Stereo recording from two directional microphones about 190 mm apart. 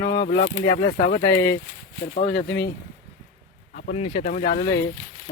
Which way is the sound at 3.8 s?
40° left (ahead or behind).